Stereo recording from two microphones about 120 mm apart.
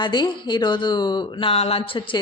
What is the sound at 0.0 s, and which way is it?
A woman's voice, 35° left (ahead or behind).